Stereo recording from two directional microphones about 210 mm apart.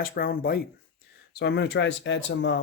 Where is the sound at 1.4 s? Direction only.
55° left (ahead or behind).